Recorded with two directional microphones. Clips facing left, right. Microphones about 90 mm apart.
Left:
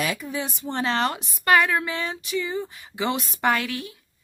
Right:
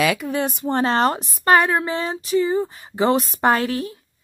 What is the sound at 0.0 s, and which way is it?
A woman's voice, 85° right.